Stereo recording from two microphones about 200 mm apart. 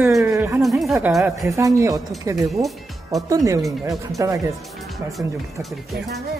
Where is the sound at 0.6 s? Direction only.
Centre (ahead or behind).